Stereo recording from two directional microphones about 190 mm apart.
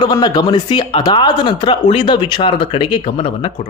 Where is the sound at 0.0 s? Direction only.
20° left (ahead or behind).